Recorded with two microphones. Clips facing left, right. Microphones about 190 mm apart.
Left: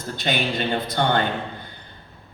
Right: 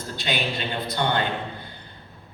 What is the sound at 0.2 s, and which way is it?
A man's voice, 50° left (ahead or behind).